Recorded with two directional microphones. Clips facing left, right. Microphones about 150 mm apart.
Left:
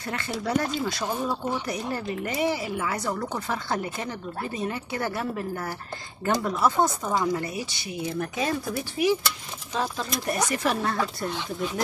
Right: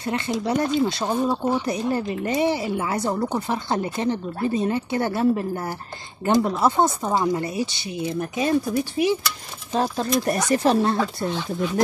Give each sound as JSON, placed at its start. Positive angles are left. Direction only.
{"t": 0.4, "sound": "speech", "side_deg": -20}
{"t": 9.8, "sound": "speech", "side_deg": -40}